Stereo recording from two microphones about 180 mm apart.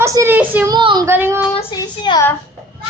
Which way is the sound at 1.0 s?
15° right (ahead or behind).